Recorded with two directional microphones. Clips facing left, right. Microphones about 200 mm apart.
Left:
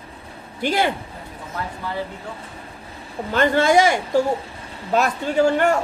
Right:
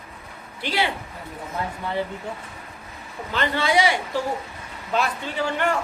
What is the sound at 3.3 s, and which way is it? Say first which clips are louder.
A woman's voice: left 6 dB; 45° left (ahead or behind).